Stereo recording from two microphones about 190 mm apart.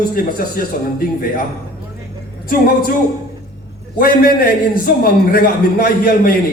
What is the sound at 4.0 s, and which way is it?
A man's voice, 50° left (ahead or behind).